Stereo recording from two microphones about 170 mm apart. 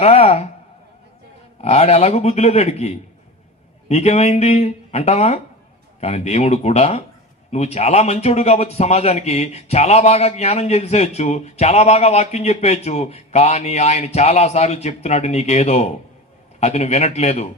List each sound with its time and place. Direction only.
0.0 s a man's voice: 35° left (ahead or behind)
1.6 s a man's voice: 35° left (ahead or behind)